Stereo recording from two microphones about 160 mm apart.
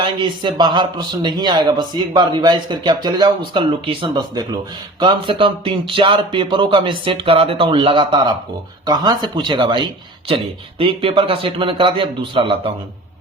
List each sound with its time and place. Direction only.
0.0 s speech: 30° right (ahead or behind)